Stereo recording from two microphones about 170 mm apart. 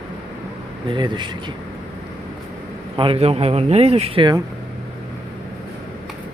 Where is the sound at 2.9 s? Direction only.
30° right (ahead or behind).